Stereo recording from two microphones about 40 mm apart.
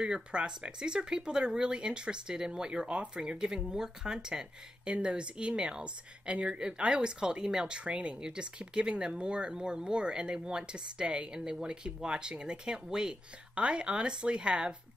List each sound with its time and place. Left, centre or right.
0.0 s speech: right